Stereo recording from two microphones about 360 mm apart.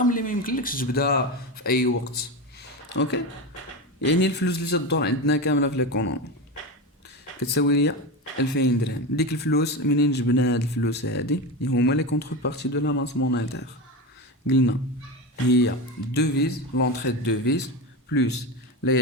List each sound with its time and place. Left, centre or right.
0.0 s a man's voice: left
7.5 s a man's voice: left